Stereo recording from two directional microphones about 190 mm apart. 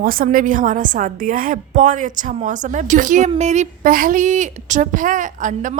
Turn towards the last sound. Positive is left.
turn(degrees=-40)  # may be behind; listen again after turning